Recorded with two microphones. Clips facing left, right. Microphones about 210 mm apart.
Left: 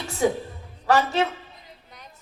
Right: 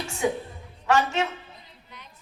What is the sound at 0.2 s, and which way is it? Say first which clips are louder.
A woman's voice: left 4 dB; 35° left (ahead or behind).